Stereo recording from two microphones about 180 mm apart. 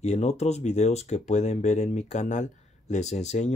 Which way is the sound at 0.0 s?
35° left (ahead or behind).